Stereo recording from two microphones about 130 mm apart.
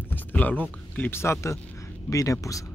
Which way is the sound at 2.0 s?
25° left (ahead or behind).